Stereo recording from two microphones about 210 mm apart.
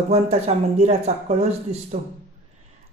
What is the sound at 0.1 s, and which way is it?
Speech, 30° right (ahead or behind).